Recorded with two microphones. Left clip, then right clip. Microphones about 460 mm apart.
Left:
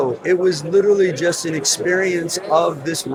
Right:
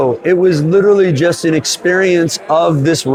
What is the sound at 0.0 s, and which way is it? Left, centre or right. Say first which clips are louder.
A man's voice: right 6 dB; right.